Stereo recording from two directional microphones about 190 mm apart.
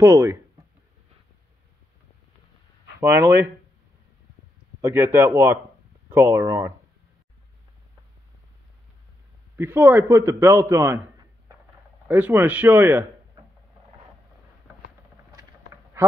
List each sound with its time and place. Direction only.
0.0 s a man's voice: 15° right (ahead or behind)
3.0 s a man's voice: 10° right (ahead or behind)
4.8 s a man's voice: 10° right (ahead or behind)
9.6 s a man's voice: 10° right (ahead or behind)
12.1 s a man's voice: 10° right (ahead or behind)
16.0 s a sound: 15° right (ahead or behind)